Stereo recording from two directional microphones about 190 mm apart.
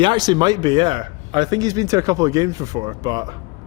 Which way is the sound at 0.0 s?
20° right (ahead or behind).